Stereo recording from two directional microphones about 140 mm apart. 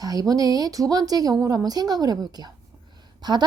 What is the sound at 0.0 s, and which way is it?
Speech, 25° right (ahead or behind).